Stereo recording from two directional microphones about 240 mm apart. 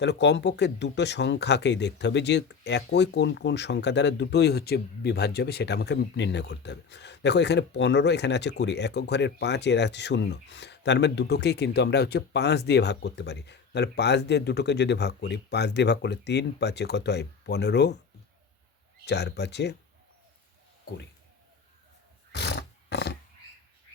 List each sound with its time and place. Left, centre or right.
0.0 s speech: left
19.0 s speech: left
22.3 s roaring cats: left